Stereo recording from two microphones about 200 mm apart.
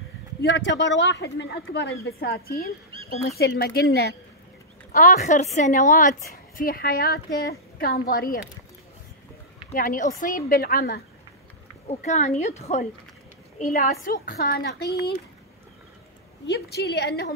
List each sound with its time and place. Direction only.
0.4 s a woman's voice: 60° left (ahead or behind)
4.9 s a woman's voice: 40° left (ahead or behind)
9.7 s a woman's voice: 40° left (ahead or behind)
11.9 s a woman's voice: 35° left (ahead or behind)
13.7 s a woman's voice: 45° left (ahead or behind)
16.4 s a woman's voice: 55° left (ahead or behind)